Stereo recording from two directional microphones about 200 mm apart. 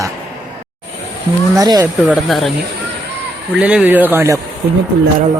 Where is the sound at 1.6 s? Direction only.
15° right (ahead or behind).